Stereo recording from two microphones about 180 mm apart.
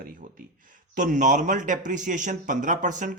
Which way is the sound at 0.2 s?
45° right (ahead or behind).